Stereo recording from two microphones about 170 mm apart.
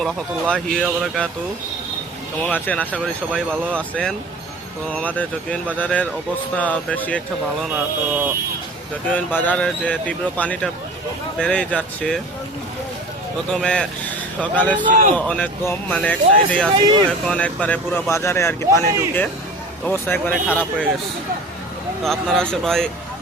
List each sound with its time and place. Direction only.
0.0 s speech: 5° left (ahead or behind)
2.4 s speech: 10° left (ahead or behind)
7.7 s speech: 10° right (ahead or behind)
9.1 s speech: 10° left (ahead or behind)
13.5 s speech: 5° left (ahead or behind)
14.8 s a man's voice: 50° right (ahead or behind)
15.1 s speech: 10° left (ahead or behind)
22.0 s speech: centre (ahead or behind)